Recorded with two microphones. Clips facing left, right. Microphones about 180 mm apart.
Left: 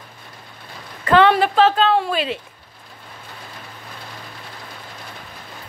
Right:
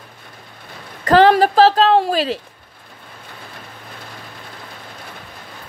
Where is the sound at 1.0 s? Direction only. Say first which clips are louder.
Right 3 dB; 40° right (ahead or behind).